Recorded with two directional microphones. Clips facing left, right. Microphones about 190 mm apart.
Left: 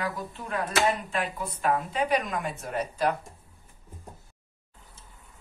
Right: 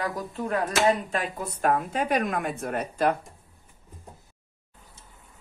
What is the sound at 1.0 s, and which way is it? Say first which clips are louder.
Speech: right 1 dB; 45° right (ahead or behind).